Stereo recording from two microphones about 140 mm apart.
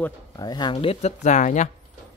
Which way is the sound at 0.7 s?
45° left (ahead or behind).